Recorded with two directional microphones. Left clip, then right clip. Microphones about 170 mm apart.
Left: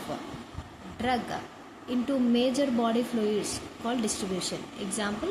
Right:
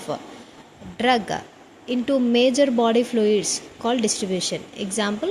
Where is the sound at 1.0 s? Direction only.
45° right (ahead or behind).